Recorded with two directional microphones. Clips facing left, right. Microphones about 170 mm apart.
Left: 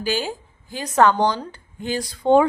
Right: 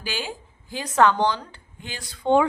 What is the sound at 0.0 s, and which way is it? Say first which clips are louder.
A woman's voice: left 7 dB; 40° left (ahead or behind).